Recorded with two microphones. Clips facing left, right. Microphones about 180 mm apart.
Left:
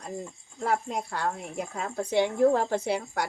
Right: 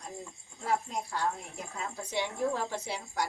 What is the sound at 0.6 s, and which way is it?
A woman's voice, 60° left (ahead or behind).